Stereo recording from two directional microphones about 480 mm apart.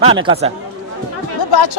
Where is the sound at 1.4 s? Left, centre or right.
Left.